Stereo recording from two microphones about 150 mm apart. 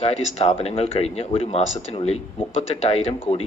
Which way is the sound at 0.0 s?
45° left (ahead or behind).